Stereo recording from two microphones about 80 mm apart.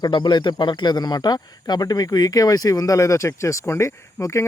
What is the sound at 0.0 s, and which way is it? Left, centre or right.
Speech, left.